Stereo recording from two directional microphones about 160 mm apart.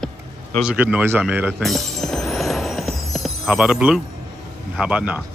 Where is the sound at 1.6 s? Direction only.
Centre (ahead or behind).